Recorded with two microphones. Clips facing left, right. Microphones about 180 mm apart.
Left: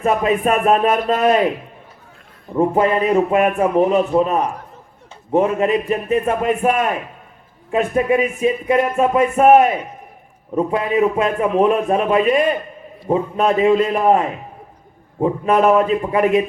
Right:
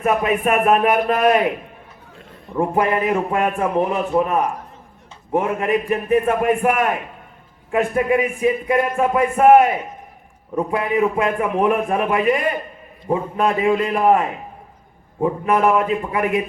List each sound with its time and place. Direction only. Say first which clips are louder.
0.0 s speech: left 2 dB; 30° left (ahead or behind)
2.6 s speech: left 3 dB; 25° left (ahead or behind)
15.2 s speech: left 2 dB; 20° left (ahead or behind)